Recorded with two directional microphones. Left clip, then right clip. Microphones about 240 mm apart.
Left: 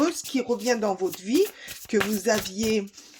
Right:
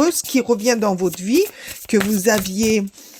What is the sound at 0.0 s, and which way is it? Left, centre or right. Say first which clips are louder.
Speech: right 8 dB; right.